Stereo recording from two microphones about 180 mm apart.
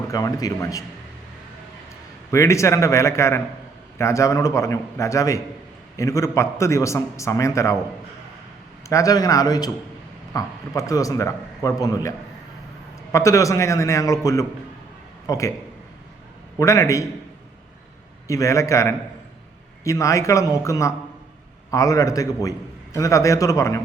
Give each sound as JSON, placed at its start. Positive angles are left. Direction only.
{"t": 0.1, "sound": "a man's voice", "side_deg": 20}
{"t": 2.3, "sound": "a man's voice", "side_deg": 15}
{"t": 8.9, "sound": "a man's voice", "side_deg": 20}
{"t": 16.6, "sound": "a man's voice", "side_deg": 15}
{"t": 18.3, "sound": "a man's voice", "side_deg": 15}